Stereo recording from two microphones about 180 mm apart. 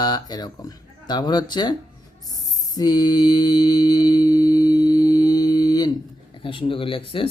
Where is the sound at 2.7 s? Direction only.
20° left (ahead or behind).